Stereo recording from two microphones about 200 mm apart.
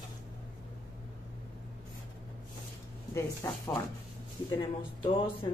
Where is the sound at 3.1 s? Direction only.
15° left (ahead or behind).